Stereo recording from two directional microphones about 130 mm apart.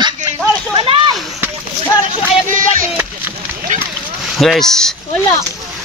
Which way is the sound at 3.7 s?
75° right (ahead or behind).